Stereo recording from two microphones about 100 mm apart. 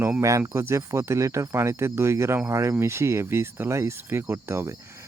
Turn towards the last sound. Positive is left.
turn(degrees=-25)  # may be behind; listen again after turning